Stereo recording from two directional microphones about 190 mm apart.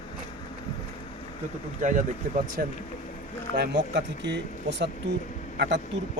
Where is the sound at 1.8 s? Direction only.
40° right (ahead or behind); by 4.4 s 65° right (ahead or behind).